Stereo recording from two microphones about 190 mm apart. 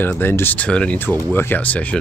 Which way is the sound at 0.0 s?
10° left (ahead or behind).